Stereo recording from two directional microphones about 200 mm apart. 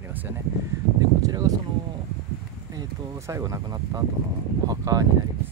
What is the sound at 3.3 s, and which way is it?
Speech, 15° right (ahead or behind).